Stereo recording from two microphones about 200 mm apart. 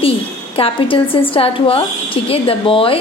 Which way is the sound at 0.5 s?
25° left (ahead or behind).